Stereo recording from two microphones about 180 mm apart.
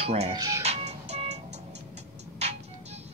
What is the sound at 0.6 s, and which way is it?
Music, 35° right (ahead or behind).